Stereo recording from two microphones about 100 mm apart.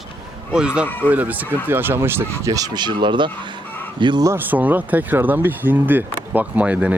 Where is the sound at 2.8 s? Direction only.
50° right (ahead or behind).